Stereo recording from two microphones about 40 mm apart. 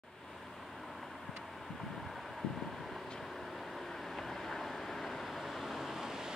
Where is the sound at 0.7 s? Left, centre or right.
Centre.